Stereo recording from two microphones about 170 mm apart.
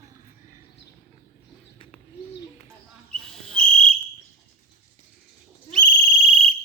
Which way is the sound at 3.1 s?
5° left (ahead or behind).